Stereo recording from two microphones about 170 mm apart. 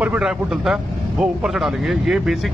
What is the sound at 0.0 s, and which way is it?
Speech, 5° right (ahead or behind).